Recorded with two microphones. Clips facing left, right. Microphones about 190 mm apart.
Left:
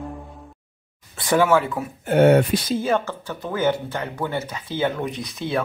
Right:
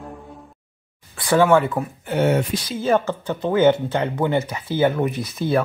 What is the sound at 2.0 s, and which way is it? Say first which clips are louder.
Speech: left 5 dB; 55° left (ahead or behind).